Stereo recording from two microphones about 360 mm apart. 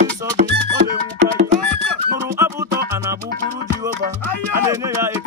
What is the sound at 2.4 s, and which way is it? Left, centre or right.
Music, centre.